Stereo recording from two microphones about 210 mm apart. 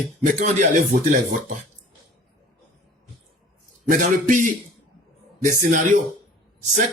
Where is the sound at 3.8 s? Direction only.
40° right (ahead or behind).